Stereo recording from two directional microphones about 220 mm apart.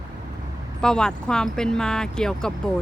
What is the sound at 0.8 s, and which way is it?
Speech, 5° left (ahead or behind).